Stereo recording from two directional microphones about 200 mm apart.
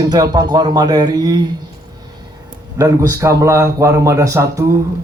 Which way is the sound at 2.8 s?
15° right (ahead or behind).